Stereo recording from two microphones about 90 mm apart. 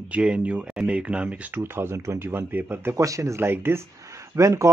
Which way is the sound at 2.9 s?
35° right (ahead or behind).